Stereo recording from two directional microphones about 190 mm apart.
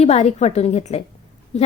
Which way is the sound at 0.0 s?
35° left (ahead or behind).